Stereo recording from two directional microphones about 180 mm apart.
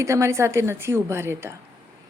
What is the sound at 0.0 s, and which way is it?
Speech, 15° right (ahead or behind).